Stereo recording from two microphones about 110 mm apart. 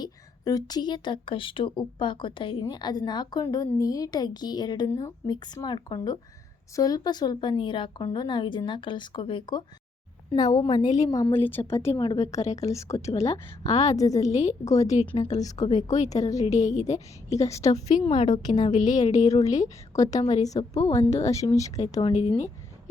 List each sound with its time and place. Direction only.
0.0 s a woman's voice: 35° left (ahead or behind)
3.4 s a woman's voice: 30° left (ahead or behind)
11.3 s a woman's voice: 20° left (ahead or behind)
11.9 s a woman's voice: 35° left (ahead or behind)
13.7 s a woman's voice: 90° left
13.9 s a woman's voice: 30° left (ahead or behind)
14.3 s a woman's voice: 90° left
14.6 s a woman's voice: 30° left (ahead or behind)
16.5 s a woman's voice: 90° left
17.4 s a woman's voice: 30° left (ahead or behind)
17.7 s a woman's voice: 90° left
18.4 s a woman's voice: 45° left (ahead or behind)
18.7 s a woman's voice: 90° left
19.3 s a woman's voice: 30° left (ahead or behind)